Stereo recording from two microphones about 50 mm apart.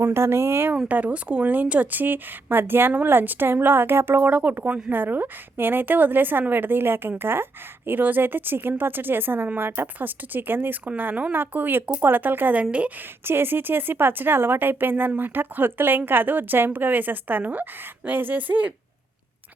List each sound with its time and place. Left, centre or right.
0.0 s speech: right
0.9 s a woman's voice: right
4.3 s a woman's voice: right